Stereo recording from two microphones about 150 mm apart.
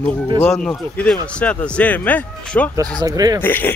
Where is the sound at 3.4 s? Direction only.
15° left (ahead or behind).